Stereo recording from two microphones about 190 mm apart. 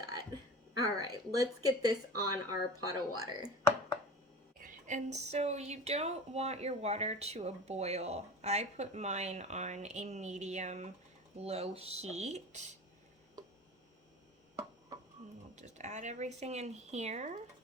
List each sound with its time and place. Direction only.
0.8 s speech: 20° right (ahead or behind)
4.6 s speech: 40° right (ahead or behind)
15.5 s speech: 40° right (ahead or behind)